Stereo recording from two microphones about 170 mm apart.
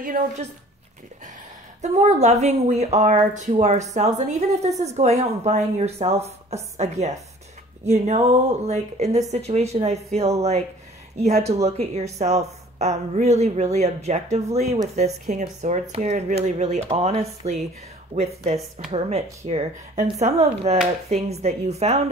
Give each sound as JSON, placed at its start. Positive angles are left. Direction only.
{"t": 0.2, "sound": "speech", "side_deg": -55}
{"t": 1.8, "sound": "speech", "side_deg": -40}
{"t": 11.1, "sound": "speech", "side_deg": -40}
{"t": 18.9, "sound": "speech", "side_deg": -40}